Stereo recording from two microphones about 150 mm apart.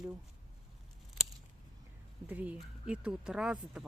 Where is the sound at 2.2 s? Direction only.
10° right (ahead or behind).